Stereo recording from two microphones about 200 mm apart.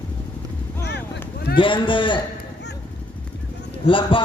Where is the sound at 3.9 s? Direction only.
25° left (ahead or behind).